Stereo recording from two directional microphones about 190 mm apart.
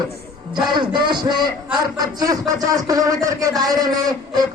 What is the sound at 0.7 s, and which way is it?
Speech, 25° right (ahead or behind).